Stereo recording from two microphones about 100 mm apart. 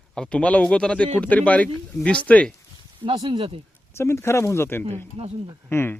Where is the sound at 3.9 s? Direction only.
25° left (ahead or behind).